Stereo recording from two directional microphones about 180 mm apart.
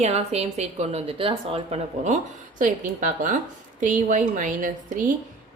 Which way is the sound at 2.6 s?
45° right (ahead or behind).